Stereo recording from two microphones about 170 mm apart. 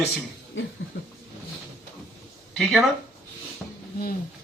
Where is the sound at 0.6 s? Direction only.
90° left.